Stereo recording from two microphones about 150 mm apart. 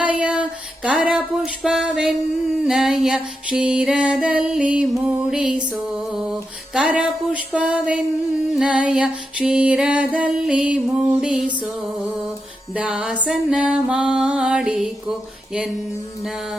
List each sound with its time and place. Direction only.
0.0 s music: 10° right (ahead or behind)
12.7 s music: 5° right (ahead or behind)
16.2 s music: 5° right (ahead or behind)